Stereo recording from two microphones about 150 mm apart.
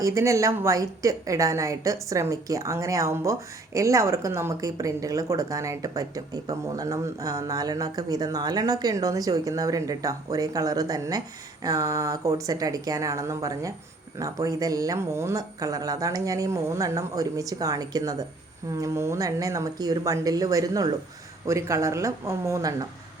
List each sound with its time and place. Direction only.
0.0 s a woman's voice: 20° right (ahead or behind)